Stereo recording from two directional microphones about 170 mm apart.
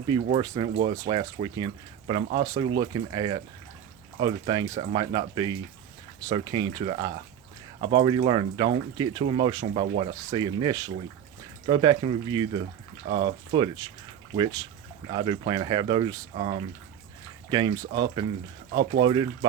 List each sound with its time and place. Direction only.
0.3 s speech: 25° right (ahead or behind)
17.5 s speech: 25° right (ahead or behind)